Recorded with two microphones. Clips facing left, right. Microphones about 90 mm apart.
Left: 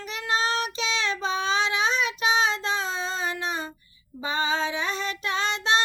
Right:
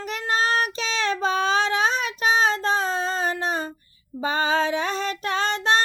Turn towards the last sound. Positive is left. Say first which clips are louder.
# right 3 dB
turn(degrees=-45)  # may be behind; listen again after turning